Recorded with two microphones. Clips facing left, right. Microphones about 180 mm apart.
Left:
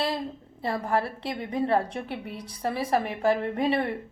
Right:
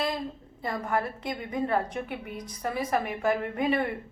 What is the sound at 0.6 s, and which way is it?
A woman's voice, 30° left (ahead or behind).